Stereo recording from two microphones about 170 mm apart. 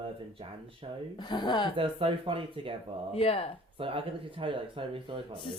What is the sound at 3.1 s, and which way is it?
Speech, 35° left (ahead or behind).